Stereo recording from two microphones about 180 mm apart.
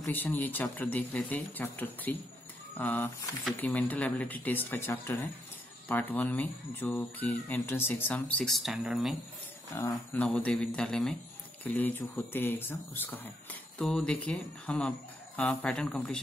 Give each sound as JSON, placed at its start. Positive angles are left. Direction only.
{"t": 0.0, "sound": "speech", "side_deg": 10}
{"t": 9.8, "sound": "speech", "side_deg": 15}
{"t": 10.2, "sound": "speech", "side_deg": 5}